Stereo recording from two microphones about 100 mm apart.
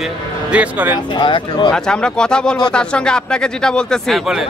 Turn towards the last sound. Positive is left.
turn(degrees=5)  # may be behind; listen again after turning